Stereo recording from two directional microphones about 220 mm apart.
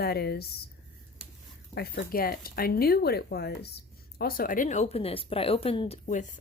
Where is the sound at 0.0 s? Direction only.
45° left (ahead or behind).